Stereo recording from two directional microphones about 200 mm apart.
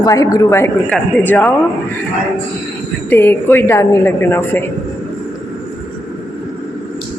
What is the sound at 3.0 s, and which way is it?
Speech, 10° left (ahead or behind).